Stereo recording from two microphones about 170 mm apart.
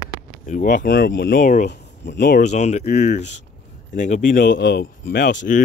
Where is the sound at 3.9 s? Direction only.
45° left (ahead or behind).